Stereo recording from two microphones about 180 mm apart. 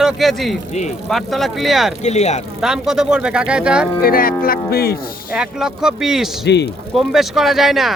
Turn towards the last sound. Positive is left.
turn(degrees=0)  # may be behind; listen again after turning